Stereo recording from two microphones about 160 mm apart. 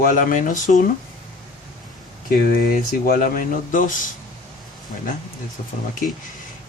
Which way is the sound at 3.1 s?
60° left (ahead or behind).